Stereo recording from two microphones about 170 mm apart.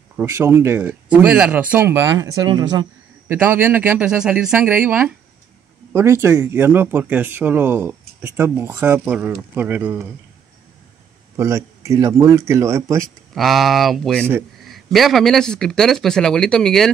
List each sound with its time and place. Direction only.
0.2 s speech: 15° right (ahead or behind)
3.3 s speech: 10° right (ahead or behind)
11.3 s speech: 15° right (ahead or behind)
13.3 s speech: centre (ahead or behind)